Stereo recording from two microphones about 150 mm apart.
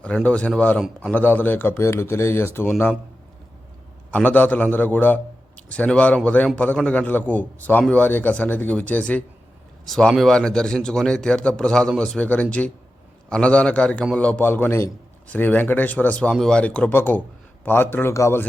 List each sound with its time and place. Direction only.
0.0 s a man's voice: 10° left (ahead or behind)
4.1 s a man's voice: 10° left (ahead or behind)